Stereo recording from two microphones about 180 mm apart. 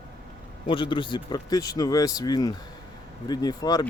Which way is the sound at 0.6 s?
30° left (ahead or behind).